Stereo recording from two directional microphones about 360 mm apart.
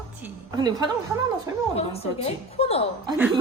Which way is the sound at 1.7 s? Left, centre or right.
Centre.